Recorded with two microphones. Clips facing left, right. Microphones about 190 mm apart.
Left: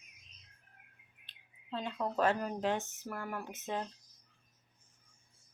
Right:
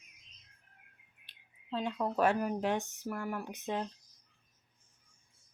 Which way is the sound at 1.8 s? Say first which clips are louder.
Right 2 dB; 10° right (ahead or behind).